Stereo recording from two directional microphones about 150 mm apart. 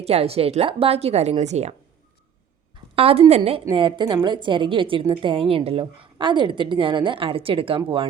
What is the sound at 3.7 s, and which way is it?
A woman's voice, 30° right (ahead or behind).